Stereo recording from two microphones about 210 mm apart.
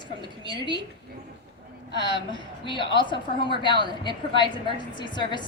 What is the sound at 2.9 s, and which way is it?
A woman's voice, 20° left (ahead or behind).